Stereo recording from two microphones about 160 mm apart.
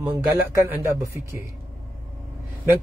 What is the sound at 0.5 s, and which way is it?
Speech, 20° right (ahead or behind).